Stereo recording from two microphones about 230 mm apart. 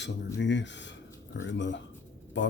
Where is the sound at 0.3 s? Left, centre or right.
Left.